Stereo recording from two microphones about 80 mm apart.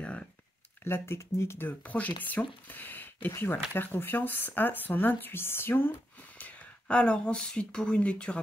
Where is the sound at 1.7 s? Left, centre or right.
Centre.